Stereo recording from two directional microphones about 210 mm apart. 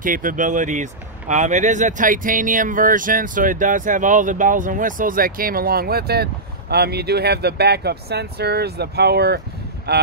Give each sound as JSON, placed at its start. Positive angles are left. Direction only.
{"t": 0.0, "sound": "speech", "side_deg": -40}